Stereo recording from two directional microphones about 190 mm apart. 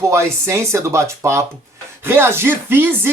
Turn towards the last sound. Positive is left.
turn(degrees=-10)  # may be behind; listen again after turning